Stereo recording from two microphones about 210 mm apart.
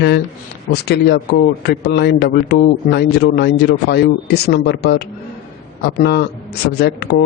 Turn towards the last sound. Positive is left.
turn(degrees=50)  # may be behind; listen again after turning